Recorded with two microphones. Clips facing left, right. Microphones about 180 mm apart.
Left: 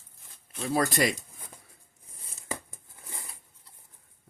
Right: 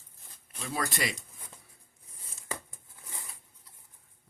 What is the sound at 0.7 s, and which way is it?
Speech, 40° left (ahead or behind).